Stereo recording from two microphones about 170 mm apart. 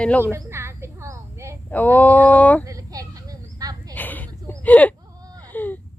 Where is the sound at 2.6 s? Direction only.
20° right (ahead or behind).